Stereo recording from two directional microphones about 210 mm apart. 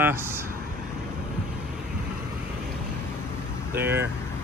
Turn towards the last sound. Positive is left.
turn(degrees=-10)  # may be behind; listen again after turning